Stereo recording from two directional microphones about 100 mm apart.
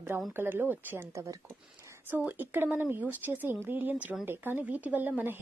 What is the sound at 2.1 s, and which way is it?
Speech, 15° right (ahead or behind).